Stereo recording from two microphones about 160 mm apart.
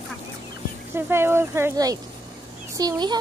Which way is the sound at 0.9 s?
15° right (ahead or behind).